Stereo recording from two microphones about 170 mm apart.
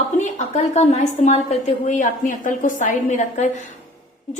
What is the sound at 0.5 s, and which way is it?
A woman's voice, 45° left (ahead or behind).